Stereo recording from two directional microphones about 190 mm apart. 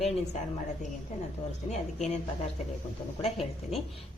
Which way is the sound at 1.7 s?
35° left (ahead or behind).